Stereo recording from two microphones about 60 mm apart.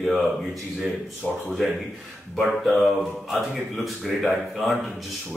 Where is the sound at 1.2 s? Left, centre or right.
Centre.